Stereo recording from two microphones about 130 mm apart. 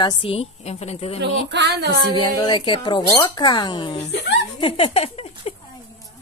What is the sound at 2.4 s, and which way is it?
A woman's voice, 35° left (ahead or behind).